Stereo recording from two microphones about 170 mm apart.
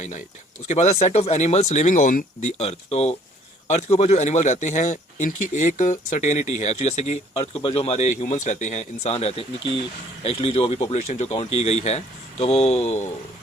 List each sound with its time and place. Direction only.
0.7 s speech: 40° left (ahead or behind)